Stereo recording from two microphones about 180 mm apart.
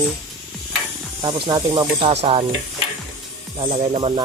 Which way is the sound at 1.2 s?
25° right (ahead or behind).